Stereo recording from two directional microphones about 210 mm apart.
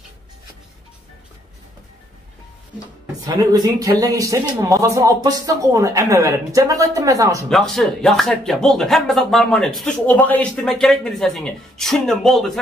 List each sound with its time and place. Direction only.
3.3 s a man's voice: 20° right (ahead or behind)
7.4 s speech: centre (ahead or behind)